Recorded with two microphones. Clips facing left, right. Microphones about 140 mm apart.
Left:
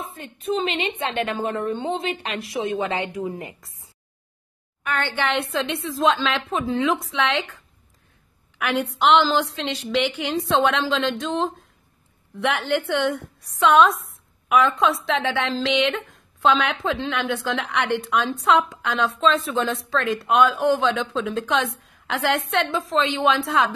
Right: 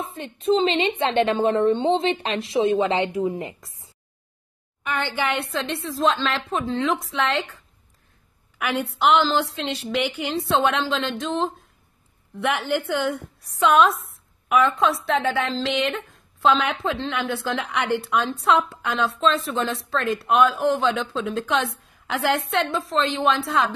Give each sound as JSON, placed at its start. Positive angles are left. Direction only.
{"t": 0.1, "sound": "a woman's voice", "side_deg": -25}
{"t": 4.9, "sound": "speech", "side_deg": -10}
{"t": 9.0, "sound": "speech", "side_deg": 0}